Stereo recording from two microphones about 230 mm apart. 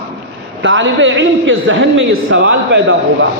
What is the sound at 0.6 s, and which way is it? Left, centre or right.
A man's voice, right.